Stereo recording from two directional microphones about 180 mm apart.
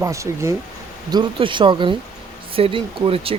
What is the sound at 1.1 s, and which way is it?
Speech, 25° right (ahead or behind).